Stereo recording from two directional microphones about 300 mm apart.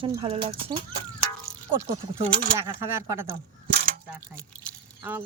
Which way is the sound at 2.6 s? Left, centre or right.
Centre.